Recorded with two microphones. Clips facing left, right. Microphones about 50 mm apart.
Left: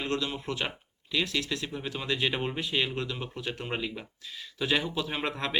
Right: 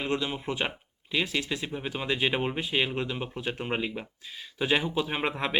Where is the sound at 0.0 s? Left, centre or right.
Centre.